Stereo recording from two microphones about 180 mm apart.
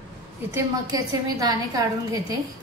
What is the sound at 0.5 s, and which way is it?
A woman's voice, 20° right (ahead or behind).